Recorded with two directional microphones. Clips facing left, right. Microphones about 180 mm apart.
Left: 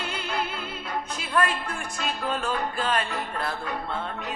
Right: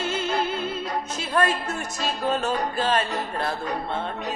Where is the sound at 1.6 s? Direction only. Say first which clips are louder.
Right 3 dB; 40° right (ahead or behind).